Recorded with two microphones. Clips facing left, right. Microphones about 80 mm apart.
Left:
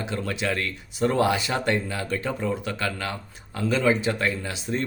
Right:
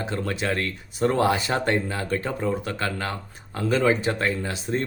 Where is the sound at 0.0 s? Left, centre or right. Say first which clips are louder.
Right 1 dB; right.